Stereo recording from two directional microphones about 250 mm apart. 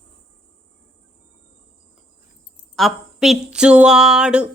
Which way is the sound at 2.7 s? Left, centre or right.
Centre.